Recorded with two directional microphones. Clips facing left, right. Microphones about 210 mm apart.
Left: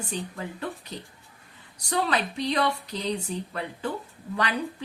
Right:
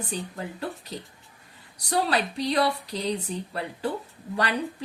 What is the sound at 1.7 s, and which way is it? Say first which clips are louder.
A woman's voice: right 1 dB; 35° right (ahead or behind).